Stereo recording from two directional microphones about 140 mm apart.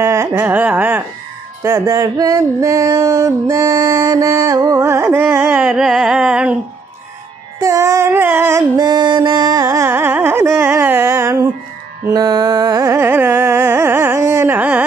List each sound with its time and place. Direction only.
0.0 s a sound: 20° right (ahead or behind)
1.6 s music: 20° right (ahead or behind); by 6.5 s 5° right (ahead or behind)
7.6 s music: 20° right (ahead or behind)
12.1 s carnatic music: 25° right (ahead or behind); by 14.9 s 10° right (ahead or behind)